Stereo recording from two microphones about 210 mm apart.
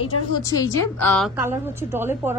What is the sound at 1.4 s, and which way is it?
Speech, 10° right (ahead or behind).